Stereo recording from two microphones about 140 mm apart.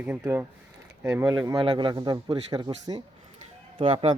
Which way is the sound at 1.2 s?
30° right (ahead or behind).